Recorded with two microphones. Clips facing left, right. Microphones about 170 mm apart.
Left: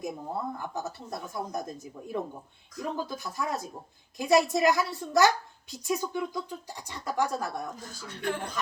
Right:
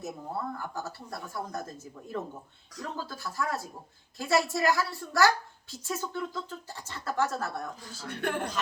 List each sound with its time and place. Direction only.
0.0 s a woman's voice: 20° left (ahead or behind)
8.0 s music: 55° right (ahead or behind)